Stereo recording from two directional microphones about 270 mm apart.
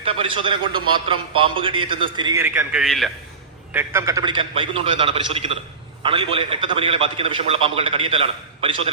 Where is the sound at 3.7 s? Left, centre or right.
Centre.